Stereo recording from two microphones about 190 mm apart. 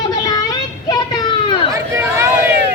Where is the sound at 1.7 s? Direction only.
15° right (ahead or behind).